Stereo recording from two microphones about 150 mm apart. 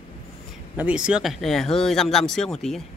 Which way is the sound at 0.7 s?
5° right (ahead or behind).